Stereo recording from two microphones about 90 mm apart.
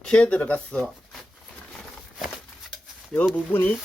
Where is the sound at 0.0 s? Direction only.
10° left (ahead or behind).